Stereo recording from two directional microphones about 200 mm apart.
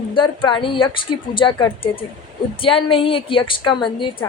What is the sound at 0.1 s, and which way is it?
A woman's voice, 25° left (ahead or behind).